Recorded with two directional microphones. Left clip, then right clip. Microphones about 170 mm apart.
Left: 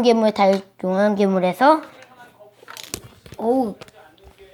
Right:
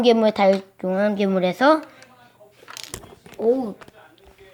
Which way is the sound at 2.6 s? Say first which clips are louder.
Left 2 dB; 15° right (ahead or behind).